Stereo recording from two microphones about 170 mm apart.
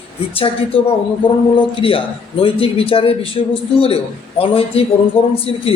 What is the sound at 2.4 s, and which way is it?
Speech, 35° left (ahead or behind).